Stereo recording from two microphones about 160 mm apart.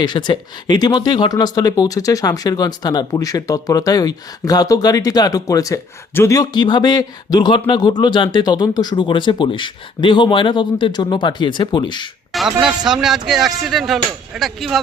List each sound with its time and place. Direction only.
0.0 s speech: 30° left (ahead or behind)
12.3 s speech: centre (ahead or behind)